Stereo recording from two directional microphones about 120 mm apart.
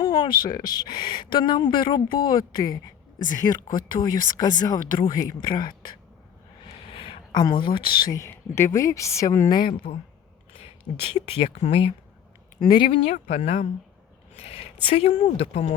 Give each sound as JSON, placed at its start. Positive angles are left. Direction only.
{"t": 0.0, "sound": "speech", "side_deg": 40}
{"t": 6.9, "sound": "a sound", "side_deg": 50}
{"t": 7.3, "sound": "speech", "side_deg": 35}
{"t": 8.1, "sound": "speech", "side_deg": 25}
{"t": 10.6, "sound": "speech", "side_deg": 50}
{"t": 12.5, "sound": "speech", "side_deg": 35}
{"t": 13.1, "sound": "a woman's voice", "side_deg": 80}
{"t": 14.3, "sound": "speech", "side_deg": 50}